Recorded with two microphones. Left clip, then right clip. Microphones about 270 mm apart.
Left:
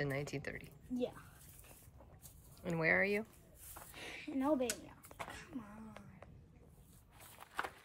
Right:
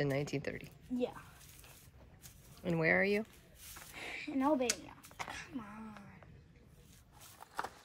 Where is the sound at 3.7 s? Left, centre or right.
Centre.